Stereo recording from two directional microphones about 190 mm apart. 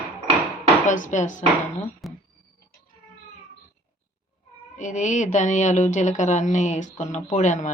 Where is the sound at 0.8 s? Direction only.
40° left (ahead or behind).